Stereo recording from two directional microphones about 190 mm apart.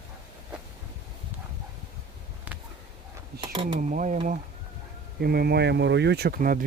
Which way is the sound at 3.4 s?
25° right (ahead or behind).